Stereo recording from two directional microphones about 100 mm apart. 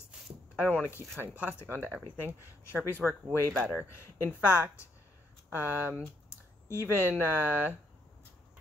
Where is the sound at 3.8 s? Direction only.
25° left (ahead or behind).